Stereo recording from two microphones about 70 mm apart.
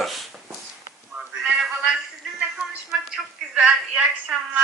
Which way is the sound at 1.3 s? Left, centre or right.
Centre.